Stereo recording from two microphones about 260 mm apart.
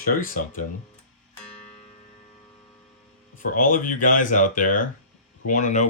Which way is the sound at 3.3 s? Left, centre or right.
Left.